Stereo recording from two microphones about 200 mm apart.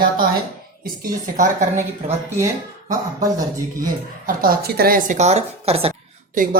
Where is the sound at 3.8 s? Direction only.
45° right (ahead or behind).